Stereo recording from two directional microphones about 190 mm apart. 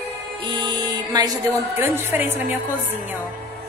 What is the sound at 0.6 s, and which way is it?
A woman's voice, 20° right (ahead or behind).